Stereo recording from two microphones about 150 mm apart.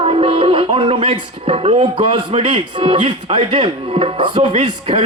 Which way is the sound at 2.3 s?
35° right (ahead or behind).